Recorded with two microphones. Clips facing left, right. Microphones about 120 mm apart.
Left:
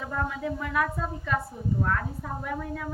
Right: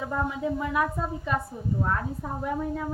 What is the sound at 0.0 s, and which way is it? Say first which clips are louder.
A woman's voice: right 2 dB; 15° right (ahead or behind).